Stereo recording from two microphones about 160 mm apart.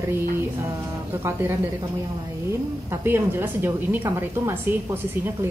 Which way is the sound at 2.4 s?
15° right (ahead or behind).